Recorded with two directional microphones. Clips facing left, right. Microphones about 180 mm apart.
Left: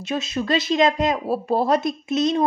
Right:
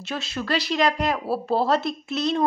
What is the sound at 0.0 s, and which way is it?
A woman's voice, 20° left (ahead or behind).